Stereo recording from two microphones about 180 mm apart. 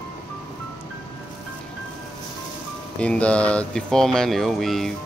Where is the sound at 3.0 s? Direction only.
5° left (ahead or behind).